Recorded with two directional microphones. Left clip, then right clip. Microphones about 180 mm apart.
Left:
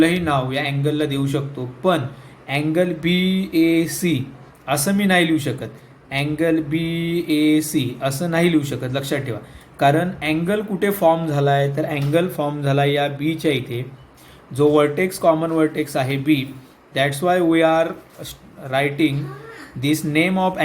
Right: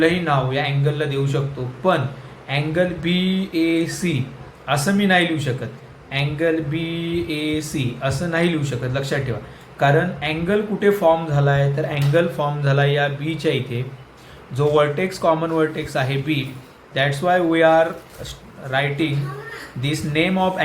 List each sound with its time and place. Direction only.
0.0 s speech: 50° left (ahead or behind)
2.5 s speech: 45° left (ahead or behind)
11.7 s speech: 45° left (ahead or behind)